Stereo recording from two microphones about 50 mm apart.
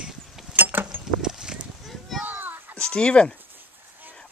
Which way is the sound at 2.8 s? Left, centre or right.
Centre.